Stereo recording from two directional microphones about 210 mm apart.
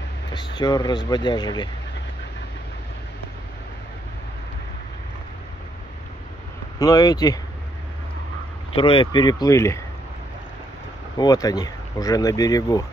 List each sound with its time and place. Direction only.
0.6 s speech: 20° left (ahead or behind)
6.8 s speech: 20° left (ahead or behind)
8.7 s speech: 25° left (ahead or behind)
11.1 s speech: 15° left (ahead or behind)